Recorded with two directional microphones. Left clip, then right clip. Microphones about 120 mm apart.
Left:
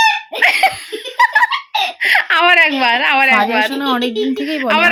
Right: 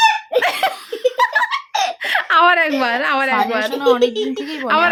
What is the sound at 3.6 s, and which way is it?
Speech, 35° left (ahead or behind).